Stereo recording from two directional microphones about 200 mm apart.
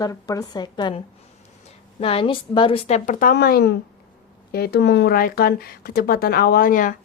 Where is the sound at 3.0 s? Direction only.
45° left (ahead or behind).